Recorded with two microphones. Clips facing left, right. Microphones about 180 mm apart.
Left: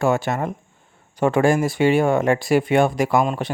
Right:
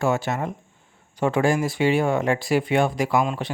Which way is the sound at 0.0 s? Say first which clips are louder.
Left 3 dB; 55° left (ahead or behind).